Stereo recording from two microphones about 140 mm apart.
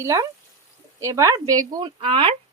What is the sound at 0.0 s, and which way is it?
Speech, 20° right (ahead or behind).